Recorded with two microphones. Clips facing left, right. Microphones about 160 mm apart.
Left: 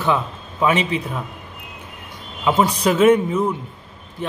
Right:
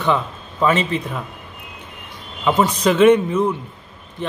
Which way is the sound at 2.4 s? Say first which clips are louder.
Right 1 dB; 10° left (ahead or behind).